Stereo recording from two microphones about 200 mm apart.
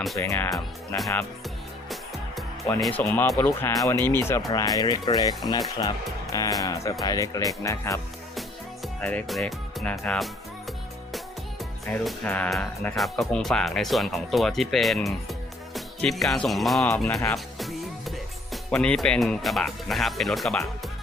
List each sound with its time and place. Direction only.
0.2 s speech: 10° left (ahead or behind)
3.0 s speech: 10° left (ahead or behind)
8.4 s music: 5° left (ahead or behind)
10.0 s speech: 5° left (ahead or behind)
11.9 s speech: 5° left (ahead or behind)
17.3 s music: centre (ahead or behind)
18.5 s speech: 5° left (ahead or behind)